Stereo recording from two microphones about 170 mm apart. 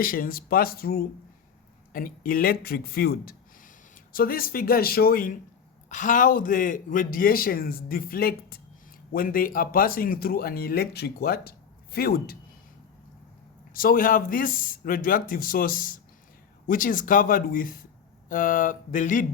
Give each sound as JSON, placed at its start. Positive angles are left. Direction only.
{"t": 0.0, "sound": "speech", "side_deg": 60}
{"t": 13.7, "sound": "speech", "side_deg": 55}